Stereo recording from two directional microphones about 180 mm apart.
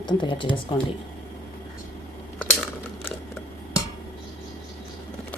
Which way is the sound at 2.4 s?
10° left (ahead or behind).